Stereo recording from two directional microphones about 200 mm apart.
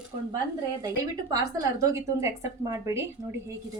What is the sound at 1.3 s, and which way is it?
A woman's voice, 15° right (ahead or behind).